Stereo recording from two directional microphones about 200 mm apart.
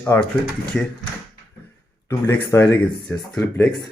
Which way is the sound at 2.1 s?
15° left (ahead or behind).